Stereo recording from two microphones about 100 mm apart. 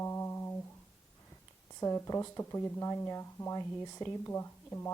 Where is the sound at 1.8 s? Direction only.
35° left (ahead or behind).